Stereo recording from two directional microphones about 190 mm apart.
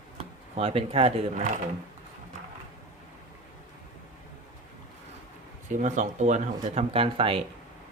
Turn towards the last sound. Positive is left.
turn(degrees=-30)  # may be behind; listen again after turning